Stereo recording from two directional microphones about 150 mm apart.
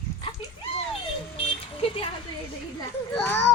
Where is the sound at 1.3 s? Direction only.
35° left (ahead or behind).